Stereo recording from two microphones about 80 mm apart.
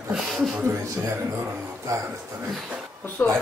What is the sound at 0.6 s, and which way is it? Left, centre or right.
A man's voice, right.